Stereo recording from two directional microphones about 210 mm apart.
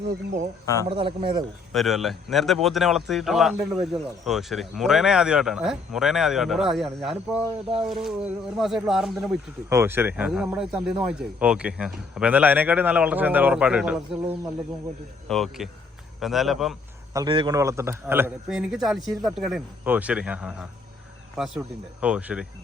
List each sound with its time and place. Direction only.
0.6 s speech: 15° left (ahead or behind)
0.9 s speech: 25° right (ahead or behind)
1.7 s speech: centre (ahead or behind)
17.2 s speech: 20° right (ahead or behind); by 22.4 s 5° right (ahead or behind)